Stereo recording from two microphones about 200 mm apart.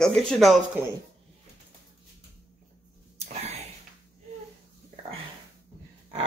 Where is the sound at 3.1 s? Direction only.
30° right (ahead or behind).